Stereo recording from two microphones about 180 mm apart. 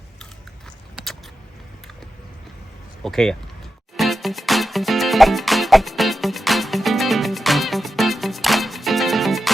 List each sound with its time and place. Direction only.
3.0 s speech: centre (ahead or behind)
3.9 s music: centre (ahead or behind)